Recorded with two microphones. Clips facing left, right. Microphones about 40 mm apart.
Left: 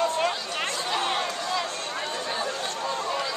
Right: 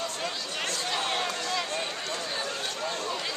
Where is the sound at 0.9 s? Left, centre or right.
Centre.